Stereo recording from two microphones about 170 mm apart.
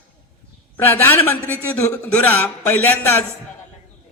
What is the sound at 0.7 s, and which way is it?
A man's voice, 10° left (ahead or behind).